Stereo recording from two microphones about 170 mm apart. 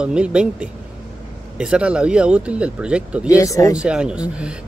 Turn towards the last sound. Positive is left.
turn(degrees=-5)  # may be behind; listen again after turning